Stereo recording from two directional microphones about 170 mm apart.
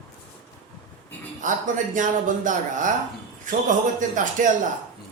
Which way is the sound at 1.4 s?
50° right (ahead or behind).